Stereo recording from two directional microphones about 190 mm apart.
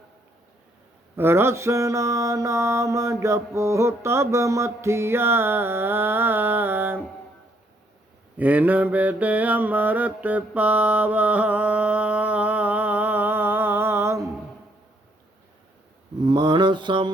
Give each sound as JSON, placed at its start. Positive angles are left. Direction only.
{"t": 1.1, "sound": "mantra", "side_deg": -10}
{"t": 8.4, "sound": "mantra", "side_deg": -10}
{"t": 16.2, "sound": "mantra", "side_deg": -25}